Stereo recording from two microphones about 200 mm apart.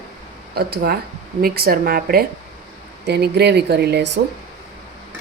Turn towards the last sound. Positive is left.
turn(degrees=-60)  # may be behind; listen again after turning